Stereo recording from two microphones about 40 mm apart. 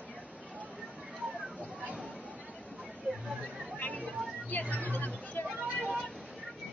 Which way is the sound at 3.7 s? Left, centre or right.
Left.